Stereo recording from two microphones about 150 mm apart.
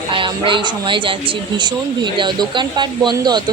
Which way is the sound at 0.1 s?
35° right (ahead or behind).